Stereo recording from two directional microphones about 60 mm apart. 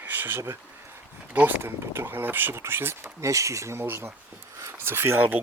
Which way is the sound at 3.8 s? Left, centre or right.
Right.